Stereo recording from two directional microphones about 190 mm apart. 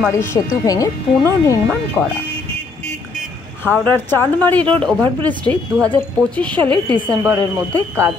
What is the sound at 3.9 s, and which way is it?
Speech, 10° left (ahead or behind).